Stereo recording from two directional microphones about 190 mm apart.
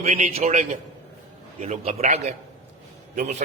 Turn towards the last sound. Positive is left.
turn(degrees=-35)  # may be behind; listen again after turning